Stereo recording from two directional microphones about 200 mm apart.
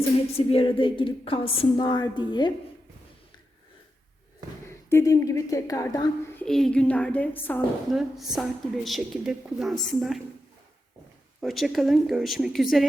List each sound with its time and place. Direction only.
0.3 s a woman's voice: 30° left (ahead or behind)
4.9 s a woman's voice: 15° left (ahead or behind); by 10.2 s centre (ahead or behind)
11.3 s speech: centre (ahead or behind)